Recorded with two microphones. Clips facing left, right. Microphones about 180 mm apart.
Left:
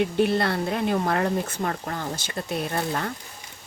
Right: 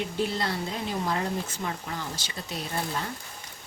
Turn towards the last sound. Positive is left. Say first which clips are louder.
# left 5 dB
turn(degrees=60)  # may be behind; listen again after turning